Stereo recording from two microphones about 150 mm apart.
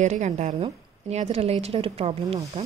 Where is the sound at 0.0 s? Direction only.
50° right (ahead or behind).